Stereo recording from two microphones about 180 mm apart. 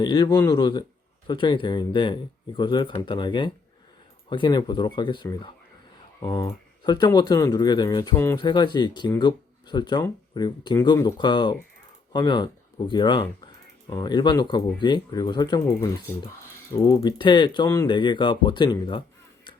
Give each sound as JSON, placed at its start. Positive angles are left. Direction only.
{"t": 0.0, "sound": "speech", "side_deg": 25}
{"t": 8.1, "sound": "speech", "side_deg": 15}
{"t": 8.4, "sound": "speech", "side_deg": 25}